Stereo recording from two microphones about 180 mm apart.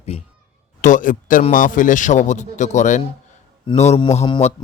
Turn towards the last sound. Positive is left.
turn(degrees=30)  # may be behind; listen again after turning